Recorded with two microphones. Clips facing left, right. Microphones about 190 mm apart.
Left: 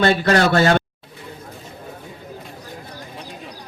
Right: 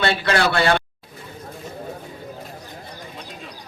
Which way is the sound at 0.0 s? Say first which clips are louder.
Left 4 dB; 40° left (ahead or behind).